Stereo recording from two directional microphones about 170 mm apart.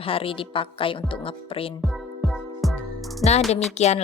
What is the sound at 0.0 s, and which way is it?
Music, 35° left (ahead or behind).